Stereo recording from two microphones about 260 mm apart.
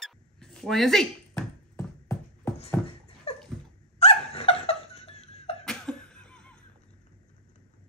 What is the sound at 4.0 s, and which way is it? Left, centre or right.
Laughter, left.